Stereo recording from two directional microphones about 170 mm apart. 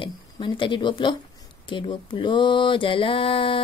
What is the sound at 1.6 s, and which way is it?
Mantra, 30° left (ahead or behind).